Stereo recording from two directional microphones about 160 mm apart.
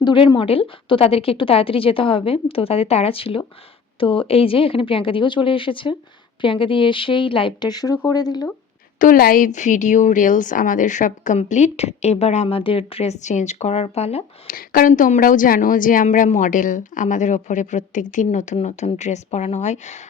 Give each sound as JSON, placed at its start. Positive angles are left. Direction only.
{"t": 0.0, "sound": "a woman's voice", "side_deg": 30}
{"t": 9.0, "sound": "a woman's voice", "side_deg": 60}
{"t": 14.4, "sound": "a woman's voice", "side_deg": 65}